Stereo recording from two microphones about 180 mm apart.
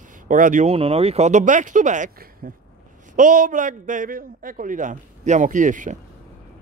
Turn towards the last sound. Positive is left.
turn(degrees=-45)  # may be behind; listen again after turning